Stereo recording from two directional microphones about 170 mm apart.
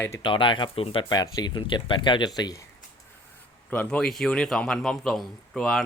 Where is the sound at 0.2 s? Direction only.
30° left (ahead or behind).